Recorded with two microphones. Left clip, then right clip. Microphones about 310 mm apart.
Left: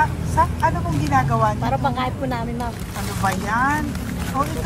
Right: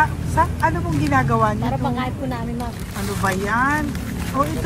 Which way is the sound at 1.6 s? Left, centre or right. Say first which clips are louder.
Left 2 dB; left.